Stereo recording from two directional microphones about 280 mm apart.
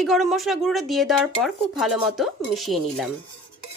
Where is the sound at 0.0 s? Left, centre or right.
Centre.